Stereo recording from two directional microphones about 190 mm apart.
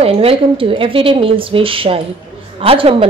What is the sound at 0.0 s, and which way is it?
A woman's voice, 30° right (ahead or behind).